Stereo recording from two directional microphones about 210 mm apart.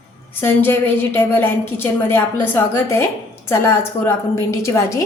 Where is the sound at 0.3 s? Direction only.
10° left (ahead or behind).